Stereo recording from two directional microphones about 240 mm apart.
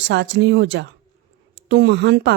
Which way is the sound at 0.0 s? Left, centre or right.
Right.